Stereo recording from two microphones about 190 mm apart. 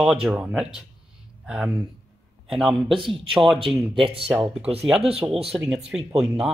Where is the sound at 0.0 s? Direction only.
Centre (ahead or behind).